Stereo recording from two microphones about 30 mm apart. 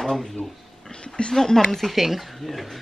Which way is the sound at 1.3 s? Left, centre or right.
Centre.